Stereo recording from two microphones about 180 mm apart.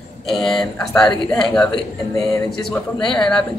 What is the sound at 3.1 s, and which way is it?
Speech, 5° left (ahead or behind).